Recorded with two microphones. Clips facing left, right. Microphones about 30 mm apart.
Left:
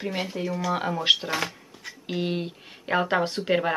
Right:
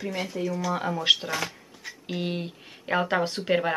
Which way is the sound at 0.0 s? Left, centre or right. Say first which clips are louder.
Left 1 dB; left.